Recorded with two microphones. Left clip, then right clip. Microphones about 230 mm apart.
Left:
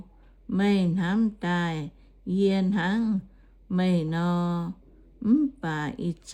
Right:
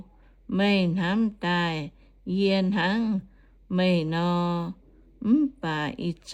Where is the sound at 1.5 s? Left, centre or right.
Right.